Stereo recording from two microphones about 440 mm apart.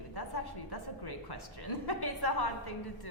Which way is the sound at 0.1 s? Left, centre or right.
Left.